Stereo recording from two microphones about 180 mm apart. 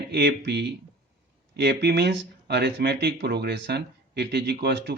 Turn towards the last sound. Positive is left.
turn(degrees=-65)  # may be behind; listen again after turning